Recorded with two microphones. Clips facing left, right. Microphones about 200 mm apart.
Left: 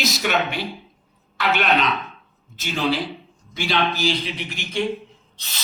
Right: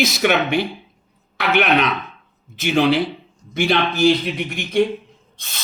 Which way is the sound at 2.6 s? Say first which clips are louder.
Right 7 dB; 65° right (ahead or behind).